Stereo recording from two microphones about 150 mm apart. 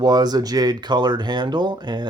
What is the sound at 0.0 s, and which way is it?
Speech, 30° right (ahead or behind).